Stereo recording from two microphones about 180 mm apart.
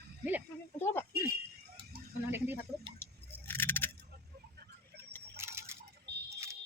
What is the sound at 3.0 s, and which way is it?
Keys jangling, 10° left (ahead or behind).